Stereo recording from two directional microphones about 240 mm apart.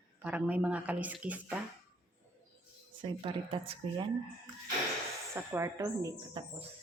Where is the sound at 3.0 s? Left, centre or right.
Right.